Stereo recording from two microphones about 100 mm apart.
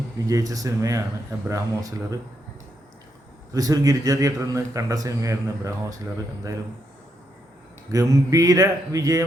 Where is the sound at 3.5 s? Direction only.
35° right (ahead or behind).